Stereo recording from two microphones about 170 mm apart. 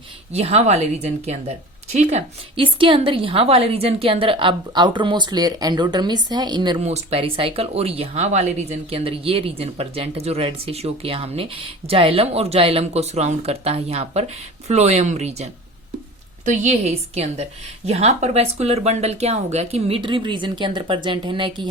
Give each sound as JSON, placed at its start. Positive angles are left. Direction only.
{"t": 0.3, "sound": "speech", "side_deg": -40}
{"t": 6.8, "sound": "speech", "side_deg": -40}
{"t": 16.5, "sound": "speech", "side_deg": -40}